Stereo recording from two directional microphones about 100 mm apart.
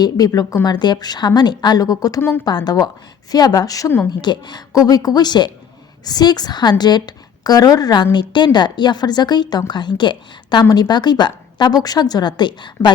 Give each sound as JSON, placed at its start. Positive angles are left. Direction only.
{"t": 0.0, "sound": "a woman's voice", "side_deg": 40}